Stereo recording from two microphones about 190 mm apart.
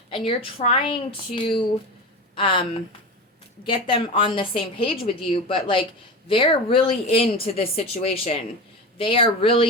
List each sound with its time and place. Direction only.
0.1 s a woman's voice: 30° left (ahead or behind)